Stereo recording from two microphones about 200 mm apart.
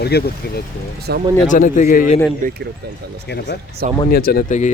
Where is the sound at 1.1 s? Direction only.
55° right (ahead or behind).